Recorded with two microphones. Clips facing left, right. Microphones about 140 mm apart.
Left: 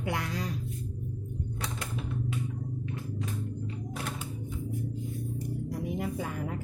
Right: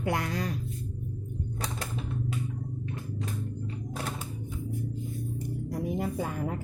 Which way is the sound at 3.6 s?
35° right (ahead or behind).